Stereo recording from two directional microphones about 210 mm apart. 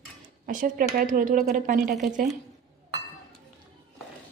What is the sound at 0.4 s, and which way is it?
A woman's voice, 40° right (ahead or behind).